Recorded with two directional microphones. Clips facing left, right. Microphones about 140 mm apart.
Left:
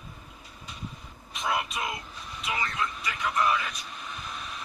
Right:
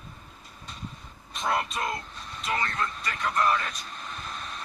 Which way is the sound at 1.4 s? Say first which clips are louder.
Right 2 dB; centre (ahead or behind).